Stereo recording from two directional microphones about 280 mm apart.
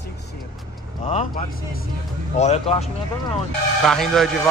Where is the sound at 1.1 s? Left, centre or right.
Left.